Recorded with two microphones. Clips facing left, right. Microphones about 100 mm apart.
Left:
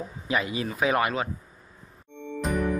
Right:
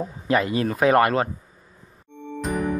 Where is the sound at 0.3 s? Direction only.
55° right (ahead or behind).